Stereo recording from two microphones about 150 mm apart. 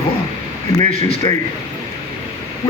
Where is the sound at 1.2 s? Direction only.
25° left (ahead or behind).